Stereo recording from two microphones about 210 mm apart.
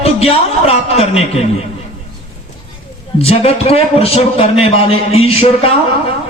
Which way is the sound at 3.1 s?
30° left (ahead or behind).